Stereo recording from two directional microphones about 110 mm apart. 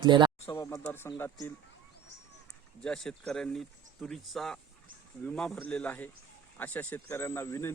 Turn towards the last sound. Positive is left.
turn(degrees=25)  # may be behind; listen again after turning